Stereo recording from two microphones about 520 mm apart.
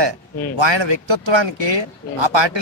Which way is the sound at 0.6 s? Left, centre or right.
Right.